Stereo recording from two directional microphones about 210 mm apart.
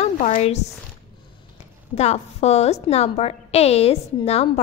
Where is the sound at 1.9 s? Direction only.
30° left (ahead or behind).